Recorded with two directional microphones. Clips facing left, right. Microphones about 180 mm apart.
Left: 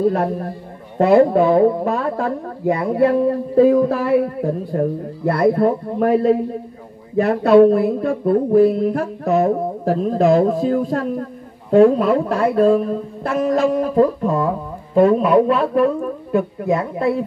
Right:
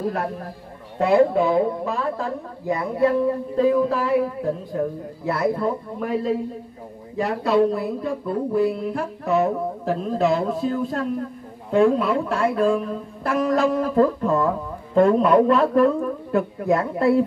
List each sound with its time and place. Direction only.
0.9 s a woman's voice: 50° left (ahead or behind); by 4.1 s 65° left (ahead or behind)
5.2 s a woman's voice: 60° left (ahead or behind)
7.2 s a sound: 60° left (ahead or behind)
11.7 s speech: 40° left (ahead or behind)
13.2 s music: 25° left (ahead or behind)
15.0 s speech: 5° left (ahead or behind)